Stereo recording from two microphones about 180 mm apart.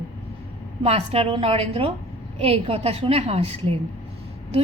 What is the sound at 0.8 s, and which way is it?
A woman's voice, 35° right (ahead or behind).